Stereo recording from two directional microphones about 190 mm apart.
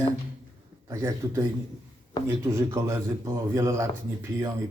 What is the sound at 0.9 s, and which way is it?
Speech, 15° right (ahead or behind).